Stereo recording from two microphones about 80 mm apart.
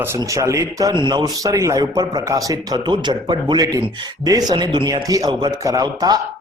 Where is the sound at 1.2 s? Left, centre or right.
Right.